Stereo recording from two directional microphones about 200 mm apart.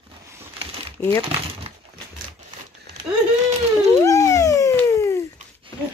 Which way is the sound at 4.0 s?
15° left (ahead or behind).